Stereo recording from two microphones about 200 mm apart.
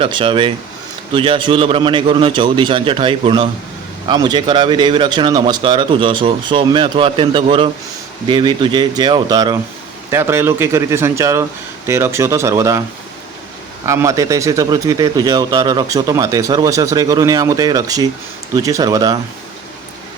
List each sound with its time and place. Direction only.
0.0 s a man's voice: 25° right (ahead or behind)
13.8 s a man's voice: 15° right (ahead or behind)